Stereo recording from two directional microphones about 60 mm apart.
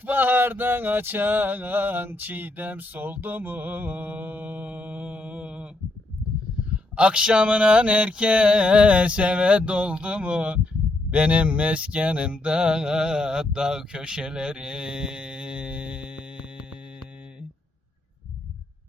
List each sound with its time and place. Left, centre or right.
0.0 s male singing: right
6.9 s mantra: centre